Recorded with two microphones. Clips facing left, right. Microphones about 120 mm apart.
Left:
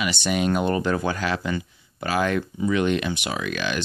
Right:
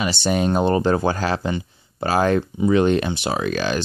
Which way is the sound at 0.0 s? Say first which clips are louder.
Right 3 dB; 35° right (ahead or behind).